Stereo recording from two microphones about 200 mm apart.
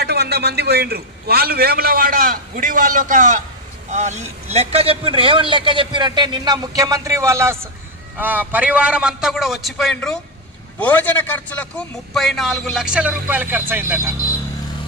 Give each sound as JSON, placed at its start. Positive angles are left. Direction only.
{"t": 0.0, "sound": "a man's voice", "side_deg": -55}